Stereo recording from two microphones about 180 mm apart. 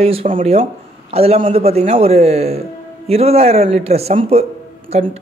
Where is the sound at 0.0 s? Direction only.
30° right (ahead or behind).